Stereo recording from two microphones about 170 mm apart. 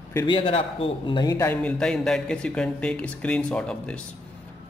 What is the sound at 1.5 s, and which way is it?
A man's voice, 5° left (ahead or behind).